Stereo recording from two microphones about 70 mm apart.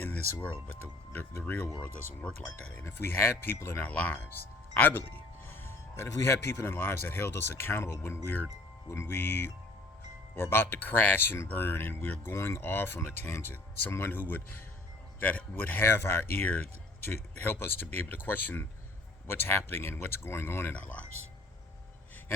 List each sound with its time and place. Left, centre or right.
0.0 s music: left
0.8 s speech: left
1.8 s speech: centre
2.7 s speech: left
20.7 s speech: left